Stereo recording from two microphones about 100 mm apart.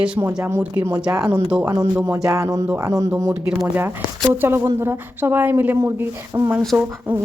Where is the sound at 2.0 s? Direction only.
30° right (ahead or behind).